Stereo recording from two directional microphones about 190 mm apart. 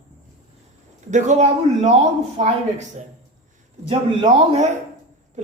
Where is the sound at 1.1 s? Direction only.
35° right (ahead or behind).